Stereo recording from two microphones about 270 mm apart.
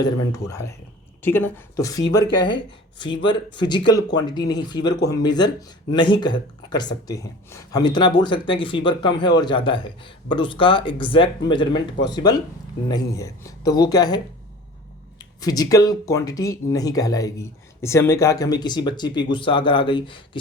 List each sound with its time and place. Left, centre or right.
0.0 s speech: centre
15.2 s speech: centre